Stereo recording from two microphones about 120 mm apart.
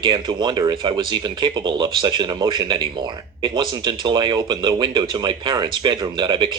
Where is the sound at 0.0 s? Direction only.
40° right (ahead or behind).